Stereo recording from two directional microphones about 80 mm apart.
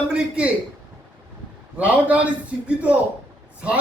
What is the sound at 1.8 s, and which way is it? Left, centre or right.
Speech, centre.